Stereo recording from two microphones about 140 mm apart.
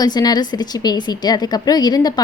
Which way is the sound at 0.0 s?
30° left (ahead or behind).